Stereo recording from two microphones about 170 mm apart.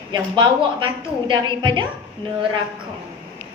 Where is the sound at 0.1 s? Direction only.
25° right (ahead or behind).